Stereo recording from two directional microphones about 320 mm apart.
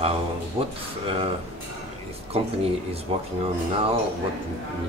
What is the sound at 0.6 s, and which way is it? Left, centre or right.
Speech, centre.